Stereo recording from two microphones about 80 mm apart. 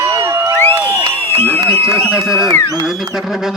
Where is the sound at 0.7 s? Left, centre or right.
Right.